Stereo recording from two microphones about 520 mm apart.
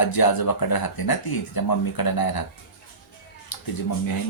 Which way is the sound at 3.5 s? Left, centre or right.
Left.